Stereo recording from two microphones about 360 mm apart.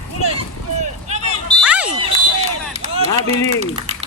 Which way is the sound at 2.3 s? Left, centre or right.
Centre.